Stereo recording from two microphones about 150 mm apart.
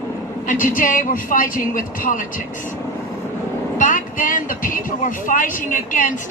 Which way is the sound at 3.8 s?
60° left (ahead or behind).